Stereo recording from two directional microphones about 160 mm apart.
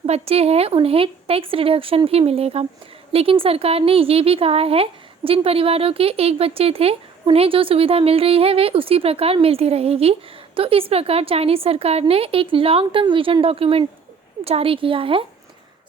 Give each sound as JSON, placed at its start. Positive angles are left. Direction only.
{"t": 0.0, "sound": "a woman's voice", "side_deg": -40}